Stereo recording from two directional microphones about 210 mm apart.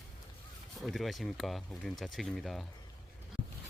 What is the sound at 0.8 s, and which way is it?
Speech, centre (ahead or behind).